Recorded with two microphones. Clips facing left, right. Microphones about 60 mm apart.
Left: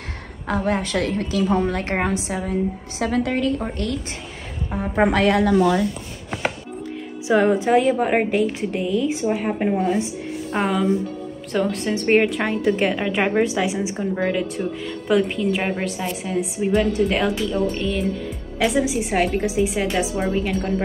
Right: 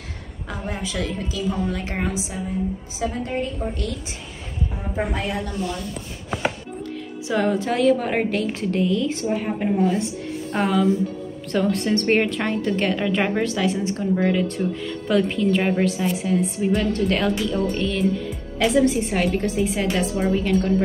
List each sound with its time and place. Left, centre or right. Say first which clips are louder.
0.5 s a woman's voice: left 8 dB; left
3.0 s a woman's voice: left 5 dB; left
3.6 s speech: left 2 dB; left
7.2 s a woman's voice: left 5 dB; left
10.5 s a woman's voice: even; centre